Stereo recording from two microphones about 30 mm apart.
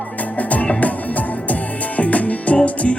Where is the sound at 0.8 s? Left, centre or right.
Left.